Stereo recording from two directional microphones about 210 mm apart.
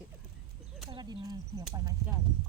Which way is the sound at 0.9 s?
20° right (ahead or behind).